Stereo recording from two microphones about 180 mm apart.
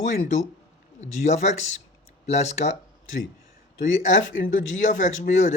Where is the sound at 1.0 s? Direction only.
40° left (ahead or behind).